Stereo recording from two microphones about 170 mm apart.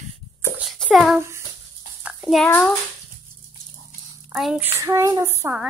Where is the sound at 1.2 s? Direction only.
15° right (ahead or behind).